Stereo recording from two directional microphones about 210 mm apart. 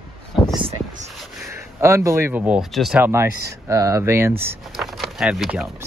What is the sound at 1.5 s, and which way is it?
Speech, 10° right (ahead or behind).